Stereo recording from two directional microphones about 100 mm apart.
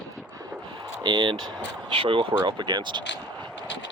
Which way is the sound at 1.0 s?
45° right (ahead or behind).